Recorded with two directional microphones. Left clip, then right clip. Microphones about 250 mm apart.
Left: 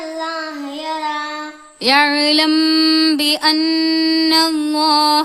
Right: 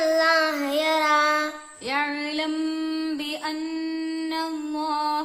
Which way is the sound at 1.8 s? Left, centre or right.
Left.